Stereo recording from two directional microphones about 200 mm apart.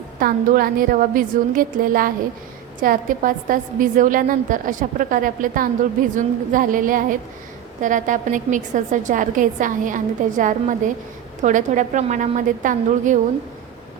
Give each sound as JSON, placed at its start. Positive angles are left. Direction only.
{"t": 0.2, "sound": "a woman's voice", "side_deg": -45}